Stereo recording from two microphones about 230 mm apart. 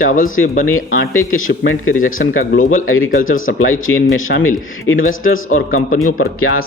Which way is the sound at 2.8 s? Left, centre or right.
Left.